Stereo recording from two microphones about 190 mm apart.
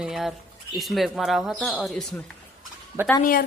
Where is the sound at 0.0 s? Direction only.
Centre (ahead or behind).